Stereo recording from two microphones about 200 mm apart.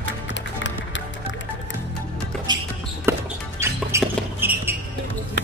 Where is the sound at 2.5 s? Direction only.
20° right (ahead or behind).